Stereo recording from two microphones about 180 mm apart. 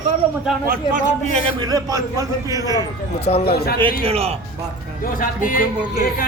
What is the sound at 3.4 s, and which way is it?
Speech, 60° left (ahead or behind).